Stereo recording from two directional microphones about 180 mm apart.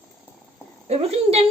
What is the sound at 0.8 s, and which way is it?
Speech, 35° right (ahead or behind).